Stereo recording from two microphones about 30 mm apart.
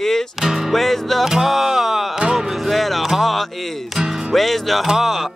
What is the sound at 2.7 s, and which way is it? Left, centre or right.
Speech, centre.